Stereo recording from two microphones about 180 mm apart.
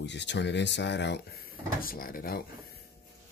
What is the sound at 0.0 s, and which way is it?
Speech, 80° left.